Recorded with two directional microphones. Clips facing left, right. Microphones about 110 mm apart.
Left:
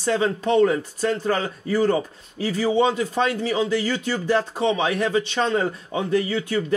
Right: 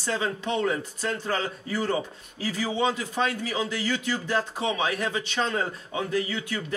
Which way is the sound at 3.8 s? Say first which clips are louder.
Left 4 dB; 40° left (ahead or behind).